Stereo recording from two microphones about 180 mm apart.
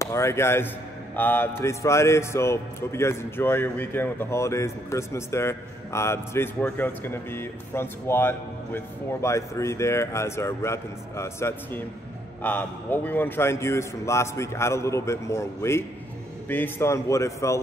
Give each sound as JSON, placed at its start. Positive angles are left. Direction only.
{"t": 0.0, "sound": "speech", "side_deg": 15}